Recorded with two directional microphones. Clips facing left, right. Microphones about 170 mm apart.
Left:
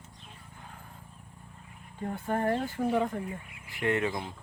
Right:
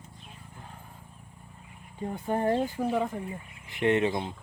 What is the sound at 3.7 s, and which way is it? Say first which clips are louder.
Speech: right 4 dB; 20° right (ahead or behind).